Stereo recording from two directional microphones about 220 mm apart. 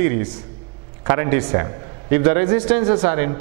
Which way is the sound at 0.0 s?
15° right (ahead or behind).